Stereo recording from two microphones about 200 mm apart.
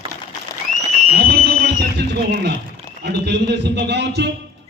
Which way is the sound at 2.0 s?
55° right (ahead or behind).